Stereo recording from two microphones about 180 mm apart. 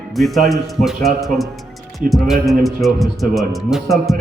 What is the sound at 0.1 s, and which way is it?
Speech, centre (ahead or behind).